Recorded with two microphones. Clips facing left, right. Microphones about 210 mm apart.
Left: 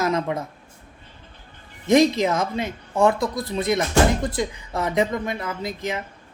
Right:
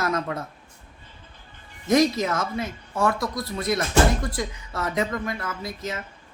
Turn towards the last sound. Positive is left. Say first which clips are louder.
# left 4 dB
turn(degrees=20)  # may be behind; listen again after turning